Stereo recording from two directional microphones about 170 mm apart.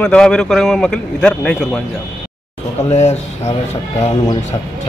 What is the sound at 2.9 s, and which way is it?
Speech, 40° left (ahead or behind).